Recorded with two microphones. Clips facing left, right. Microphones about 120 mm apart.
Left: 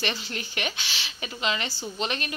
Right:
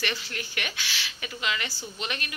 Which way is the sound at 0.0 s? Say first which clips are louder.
Left 2 dB; 25° left (ahead or behind).